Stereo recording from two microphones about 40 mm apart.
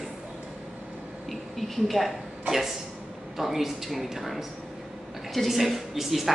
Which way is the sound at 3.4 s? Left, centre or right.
Centre.